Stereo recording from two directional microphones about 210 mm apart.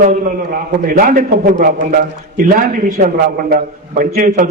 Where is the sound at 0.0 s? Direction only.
40° right (ahead or behind).